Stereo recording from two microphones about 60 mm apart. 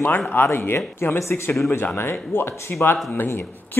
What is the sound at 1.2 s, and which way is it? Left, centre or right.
Speech, left.